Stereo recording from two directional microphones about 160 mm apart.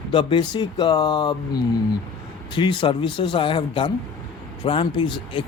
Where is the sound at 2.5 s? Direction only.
30° left (ahead or behind).